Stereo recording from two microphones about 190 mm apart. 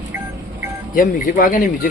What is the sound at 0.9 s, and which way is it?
Speech, 45° left (ahead or behind).